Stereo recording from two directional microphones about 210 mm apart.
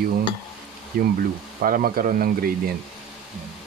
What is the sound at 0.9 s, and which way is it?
Speech, 45° right (ahead or behind).